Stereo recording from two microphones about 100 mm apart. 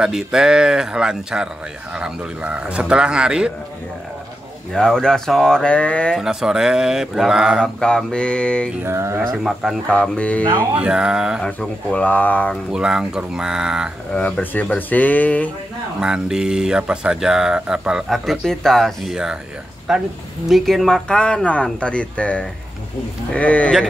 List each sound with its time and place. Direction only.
0.0 s a man's voice: 5° right (ahead or behind)
4.7 s speech: 5° left (ahead or behind)
6.1 s speech: 5° right (ahead or behind)
7.8 s speech: 10° left (ahead or behind)
8.8 s speech: 25° right (ahead or behind)
9.4 s speech: 5° right (ahead or behind)
9.8 s speech: 10° left (ahead or behind)
10.8 s a man's voice: 10° right (ahead or behind)
11.4 s speech: 10° left (ahead or behind)
12.7 s a man's voice: 10° right (ahead or behind)
14.1 s speech: 10° left (ahead or behind)
16.0 s speech: 5° right (ahead or behind); by 23.7 s 10° left (ahead or behind)